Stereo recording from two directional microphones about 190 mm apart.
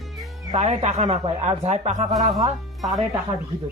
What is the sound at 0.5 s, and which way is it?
Speech, 35° right (ahead or behind).